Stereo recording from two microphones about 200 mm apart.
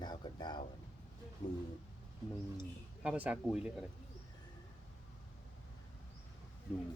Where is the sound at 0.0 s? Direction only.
20° left (ahead or behind).